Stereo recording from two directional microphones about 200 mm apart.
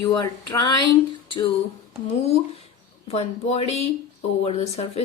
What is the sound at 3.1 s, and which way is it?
Speech, 30° left (ahead or behind).